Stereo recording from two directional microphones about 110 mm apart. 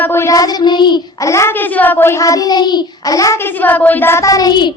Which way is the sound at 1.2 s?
25° left (ahead or behind).